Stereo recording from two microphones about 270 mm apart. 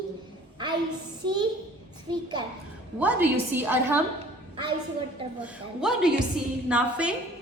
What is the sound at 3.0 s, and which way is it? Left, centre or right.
A woman's voice, centre.